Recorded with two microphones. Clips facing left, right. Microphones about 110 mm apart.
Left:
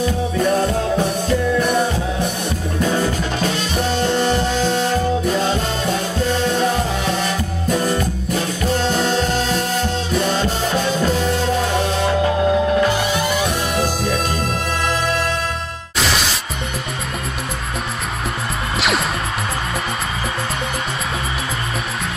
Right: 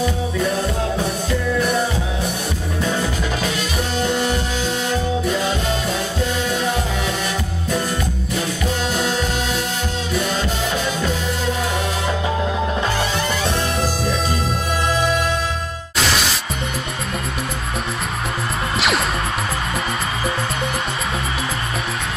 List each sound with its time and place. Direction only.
4.2 s music: 35° left (ahead or behind)
8.8 s music: 35° left (ahead or behind)
18.8 s music: centre (ahead or behind)